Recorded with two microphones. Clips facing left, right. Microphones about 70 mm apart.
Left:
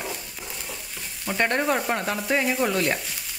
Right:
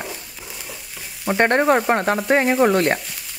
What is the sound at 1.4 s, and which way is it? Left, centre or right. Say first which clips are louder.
Sizzle: right 7 dB; right.